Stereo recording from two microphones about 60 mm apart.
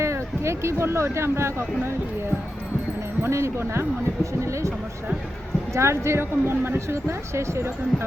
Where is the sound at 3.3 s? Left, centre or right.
Right.